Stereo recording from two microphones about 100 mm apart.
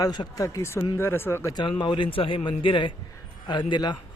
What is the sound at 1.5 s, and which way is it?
A man's voice, 50° left (ahead or behind).